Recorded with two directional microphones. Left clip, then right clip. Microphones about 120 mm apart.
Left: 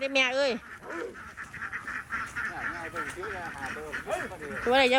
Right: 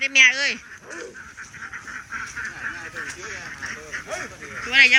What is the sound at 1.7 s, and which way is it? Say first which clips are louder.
Honk: right 1 dB; 25° left (ahead or behind).